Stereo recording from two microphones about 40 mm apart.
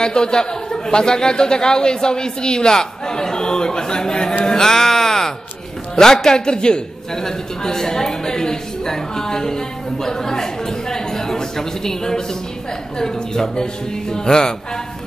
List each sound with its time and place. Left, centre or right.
0.0 s a man's voice: left
4.5 s music: centre
5.9 s a man's voice: centre
10.0 s a sound: centre
13.0 s a man's voice: centre